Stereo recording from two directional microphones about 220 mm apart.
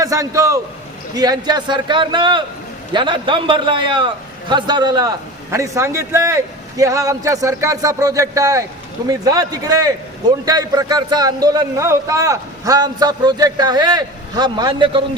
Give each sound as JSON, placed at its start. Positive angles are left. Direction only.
{"t": 0.0, "sound": "a man's voice", "side_deg": -15}